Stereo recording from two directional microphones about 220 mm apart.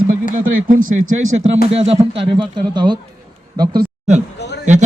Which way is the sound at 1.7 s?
25° right (ahead or behind).